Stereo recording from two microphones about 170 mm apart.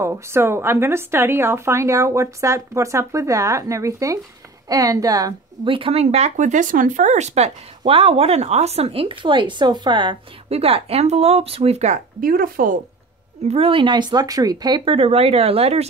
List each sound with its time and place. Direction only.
0.0 s a woman's voice: 15° right (ahead or behind); by 12.8 s 55° right (ahead or behind)
13.5 s a woman's voice: 35° right (ahead or behind)